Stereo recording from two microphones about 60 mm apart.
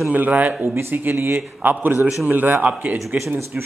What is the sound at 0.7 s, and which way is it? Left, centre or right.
A man's voice, right.